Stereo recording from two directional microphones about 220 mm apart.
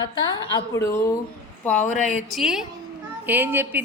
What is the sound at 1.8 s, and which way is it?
Speech, 35° left (ahead or behind).